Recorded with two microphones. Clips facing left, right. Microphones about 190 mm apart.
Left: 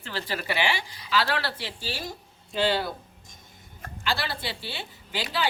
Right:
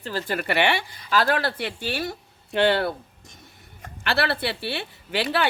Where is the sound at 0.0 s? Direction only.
45° right (ahead or behind); by 2.9 s 60° right (ahead or behind).